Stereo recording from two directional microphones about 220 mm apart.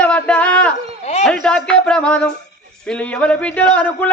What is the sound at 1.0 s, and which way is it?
Speech, 30° left (ahead or behind).